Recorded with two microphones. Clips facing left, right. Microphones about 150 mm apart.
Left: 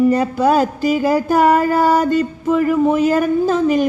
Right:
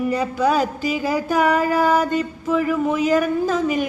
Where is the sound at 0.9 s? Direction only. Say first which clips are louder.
Left 7 dB; 45° left (ahead or behind).